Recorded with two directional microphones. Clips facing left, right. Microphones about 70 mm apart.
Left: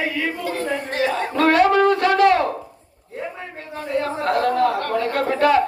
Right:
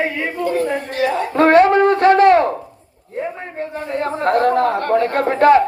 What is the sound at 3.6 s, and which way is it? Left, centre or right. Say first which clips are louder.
A woman's voice: right 2 dB; right.